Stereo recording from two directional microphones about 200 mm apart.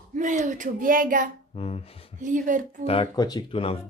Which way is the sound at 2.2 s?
40° right (ahead or behind).